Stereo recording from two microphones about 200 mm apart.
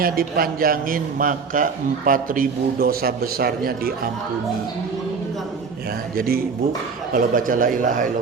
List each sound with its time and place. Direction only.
0.0 s a man's voice: 45° right (ahead or behind)
6.1 s a man's voice: 50° right (ahead or behind)